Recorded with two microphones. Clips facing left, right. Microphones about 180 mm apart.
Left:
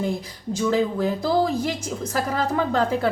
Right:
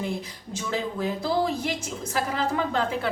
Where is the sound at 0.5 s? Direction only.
40° left (ahead or behind).